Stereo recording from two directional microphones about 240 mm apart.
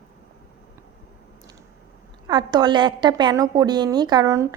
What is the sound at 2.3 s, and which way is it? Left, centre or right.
A woman's voice, centre.